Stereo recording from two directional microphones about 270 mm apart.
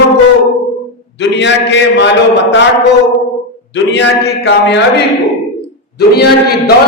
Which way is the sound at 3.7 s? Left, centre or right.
Left.